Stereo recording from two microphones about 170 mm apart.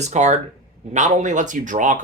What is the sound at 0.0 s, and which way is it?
Speech, 40° right (ahead or behind).